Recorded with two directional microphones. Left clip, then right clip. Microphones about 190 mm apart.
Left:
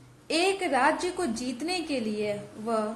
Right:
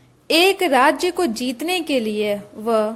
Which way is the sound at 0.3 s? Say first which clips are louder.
Right 10 dB; 45° right (ahead or behind).